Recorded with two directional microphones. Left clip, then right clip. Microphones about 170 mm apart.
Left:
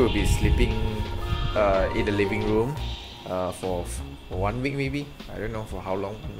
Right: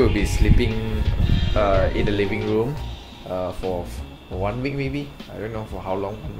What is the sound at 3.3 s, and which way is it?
Speech, 40° left (ahead or behind).